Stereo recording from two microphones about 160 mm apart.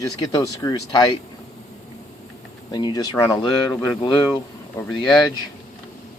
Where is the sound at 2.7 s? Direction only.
25° left (ahead or behind).